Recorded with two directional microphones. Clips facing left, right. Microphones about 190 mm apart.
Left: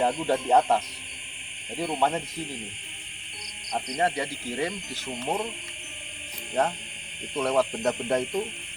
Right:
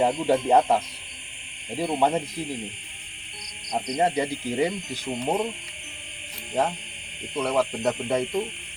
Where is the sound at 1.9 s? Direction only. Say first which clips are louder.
Right 3 dB; 15° right (ahead or behind).